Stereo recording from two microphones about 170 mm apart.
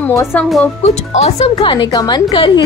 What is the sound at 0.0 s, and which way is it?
Speech, 15° left (ahead or behind).